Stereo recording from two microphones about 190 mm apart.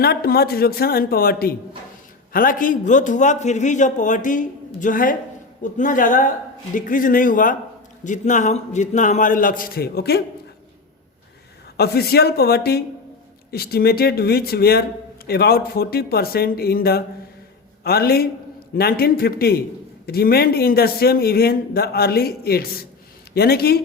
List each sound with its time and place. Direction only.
0.0 s a man's voice: 55° left (ahead or behind)
11.8 s a man's voice: 55° left (ahead or behind)